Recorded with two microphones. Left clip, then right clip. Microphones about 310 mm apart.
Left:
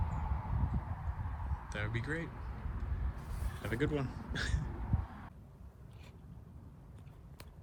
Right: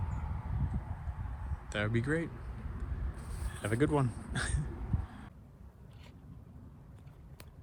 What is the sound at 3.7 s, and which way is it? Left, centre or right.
Speech, centre.